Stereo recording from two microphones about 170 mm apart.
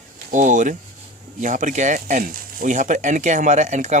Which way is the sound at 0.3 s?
50° right (ahead or behind).